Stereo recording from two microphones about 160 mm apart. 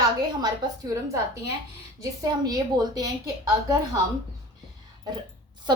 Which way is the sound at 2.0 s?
25° right (ahead or behind).